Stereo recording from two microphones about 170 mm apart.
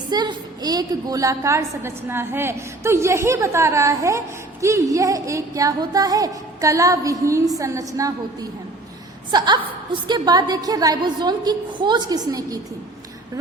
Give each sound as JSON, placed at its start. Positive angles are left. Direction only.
{"t": 0.1, "sound": "a woman's voice", "side_deg": -25}